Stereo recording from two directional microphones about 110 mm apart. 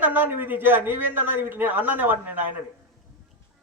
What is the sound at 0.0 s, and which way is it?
A man's voice, 15° right (ahead or behind).